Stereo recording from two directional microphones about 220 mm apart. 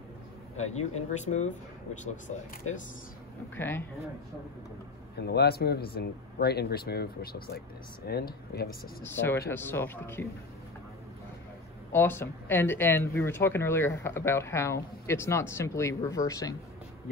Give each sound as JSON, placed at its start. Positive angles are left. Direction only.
{"t": 0.6, "sound": "speech", "side_deg": 30}
{"t": 3.5, "sound": "speech", "side_deg": 10}
{"t": 5.1, "sound": "speech", "side_deg": 50}
{"t": 9.0, "sound": "speech", "side_deg": 10}
{"t": 11.9, "sound": "speech", "side_deg": 10}